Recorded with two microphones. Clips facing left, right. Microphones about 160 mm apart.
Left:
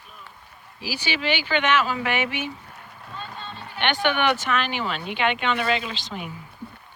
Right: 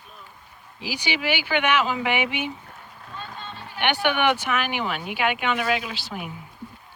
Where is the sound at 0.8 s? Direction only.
15° right (ahead or behind).